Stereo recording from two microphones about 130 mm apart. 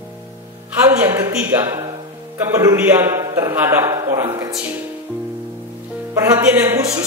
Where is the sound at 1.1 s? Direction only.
20° right (ahead or behind).